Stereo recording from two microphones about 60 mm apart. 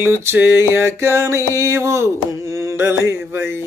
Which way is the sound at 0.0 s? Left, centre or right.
Right.